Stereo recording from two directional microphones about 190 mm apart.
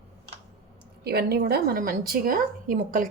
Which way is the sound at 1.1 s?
55° right (ahead or behind).